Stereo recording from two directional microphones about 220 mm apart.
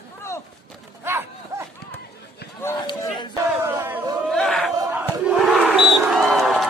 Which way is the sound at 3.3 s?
15° right (ahead or behind).